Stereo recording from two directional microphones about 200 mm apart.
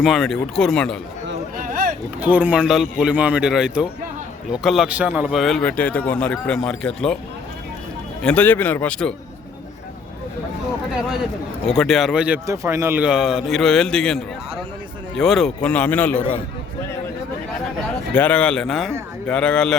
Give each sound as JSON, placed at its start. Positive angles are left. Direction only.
{"t": 0.0, "sound": "speech", "side_deg": 0}
{"t": 1.5, "sound": "vehicle", "side_deg": -45}
{"t": 2.2, "sound": "a man's voice", "side_deg": -10}
{"t": 8.2, "sound": "speech", "side_deg": 5}
{"t": 11.6, "sound": "speech", "side_deg": 0}
{"t": 18.1, "sound": "speech", "side_deg": 5}